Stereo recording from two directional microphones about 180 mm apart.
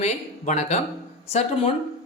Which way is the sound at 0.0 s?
40° left (ahead or behind).